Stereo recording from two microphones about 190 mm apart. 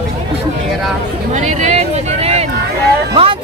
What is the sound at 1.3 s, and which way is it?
Speech, 40° right (ahead or behind).